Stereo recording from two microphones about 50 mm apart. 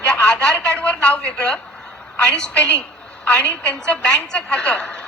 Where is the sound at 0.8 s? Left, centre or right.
Left.